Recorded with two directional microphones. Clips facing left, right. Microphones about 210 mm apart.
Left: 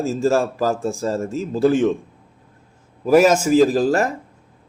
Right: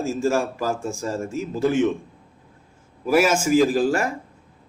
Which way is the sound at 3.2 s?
40° left (ahead or behind).